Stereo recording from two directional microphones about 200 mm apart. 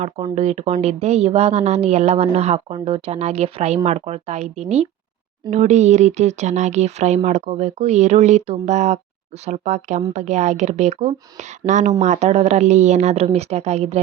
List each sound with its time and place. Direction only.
0.3 s a woman's voice: 35° right (ahead or behind)